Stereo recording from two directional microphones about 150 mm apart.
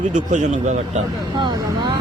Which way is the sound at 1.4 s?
30° right (ahead or behind).